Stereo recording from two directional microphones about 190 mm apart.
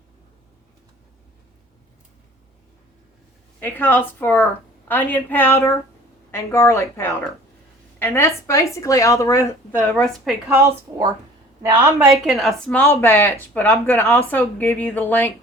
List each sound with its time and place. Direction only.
3.6 s speech: 10° left (ahead or behind)
10.5 s a woman's voice: 15° right (ahead or behind)
12.0 s speech: centre (ahead or behind)